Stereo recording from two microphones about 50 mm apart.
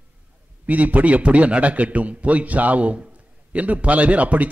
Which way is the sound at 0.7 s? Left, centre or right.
Right.